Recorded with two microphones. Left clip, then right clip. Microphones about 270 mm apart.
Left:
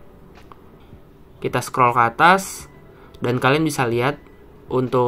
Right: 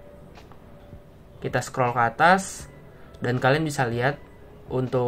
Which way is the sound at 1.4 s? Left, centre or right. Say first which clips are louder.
Left 7 dB; centre.